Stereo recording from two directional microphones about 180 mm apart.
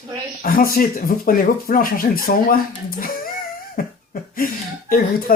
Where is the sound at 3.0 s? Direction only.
55° left (ahead or behind).